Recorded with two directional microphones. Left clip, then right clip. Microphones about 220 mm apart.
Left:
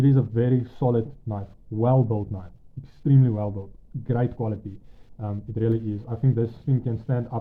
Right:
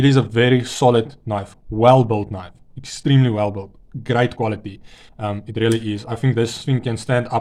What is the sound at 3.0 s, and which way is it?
Speech, 20° right (ahead or behind).